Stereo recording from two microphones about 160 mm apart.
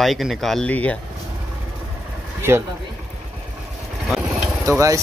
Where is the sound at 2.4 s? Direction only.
15° right (ahead or behind).